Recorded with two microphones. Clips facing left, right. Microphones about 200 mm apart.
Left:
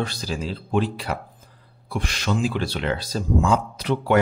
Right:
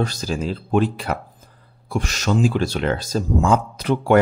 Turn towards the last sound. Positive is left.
turn(degrees=-45)  # may be behind; listen again after turning